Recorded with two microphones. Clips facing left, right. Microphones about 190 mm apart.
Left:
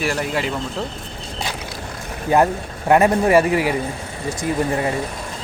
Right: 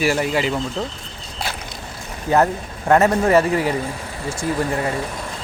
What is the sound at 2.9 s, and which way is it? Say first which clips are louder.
A man's voice: left 1 dB; 15° left (ahead or behind).